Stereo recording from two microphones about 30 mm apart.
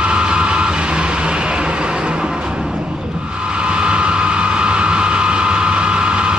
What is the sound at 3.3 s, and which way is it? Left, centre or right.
Vehicle, right.